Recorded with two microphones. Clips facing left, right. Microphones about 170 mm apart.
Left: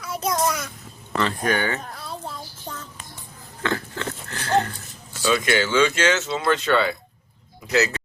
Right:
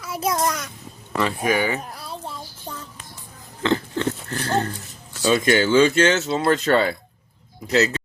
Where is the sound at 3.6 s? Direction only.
25° right (ahead or behind).